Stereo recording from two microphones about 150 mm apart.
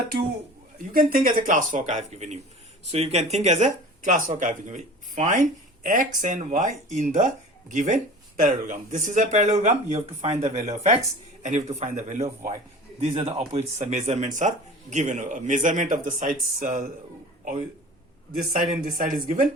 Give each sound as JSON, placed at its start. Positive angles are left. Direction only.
{"t": 0.9, "sound": "speech", "side_deg": -70}
{"t": 18.6, "sound": "speech", "side_deg": -65}